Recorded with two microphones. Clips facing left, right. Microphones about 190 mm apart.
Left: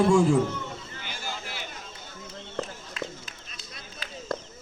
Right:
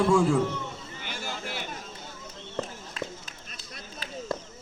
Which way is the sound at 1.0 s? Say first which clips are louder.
Right 3 dB; 50° right (ahead or behind).